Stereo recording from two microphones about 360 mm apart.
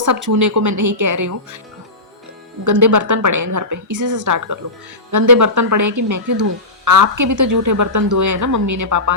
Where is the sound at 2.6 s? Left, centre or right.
Right.